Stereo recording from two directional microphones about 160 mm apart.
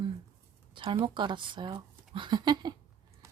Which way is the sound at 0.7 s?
30° right (ahead or behind).